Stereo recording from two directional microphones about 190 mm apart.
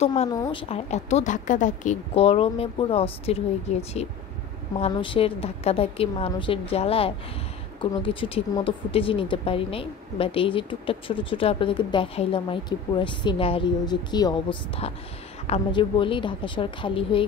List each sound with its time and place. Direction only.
0.0 s speech: 35° left (ahead or behind)
0.3 s speech: 25° left (ahead or behind)